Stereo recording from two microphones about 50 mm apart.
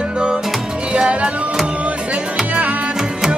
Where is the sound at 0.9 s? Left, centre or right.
Right.